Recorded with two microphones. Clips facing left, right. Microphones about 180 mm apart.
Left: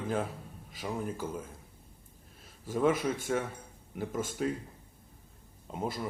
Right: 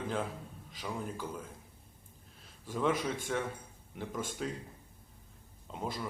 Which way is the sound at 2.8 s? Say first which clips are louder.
Left 4 dB; 5° left (ahead or behind).